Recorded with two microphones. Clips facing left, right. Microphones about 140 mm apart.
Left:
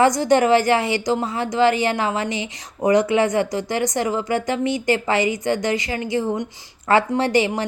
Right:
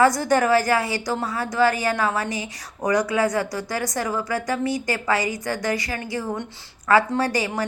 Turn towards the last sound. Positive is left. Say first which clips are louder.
# left 4 dB
turn(degrees=20)  # may be behind; listen again after turning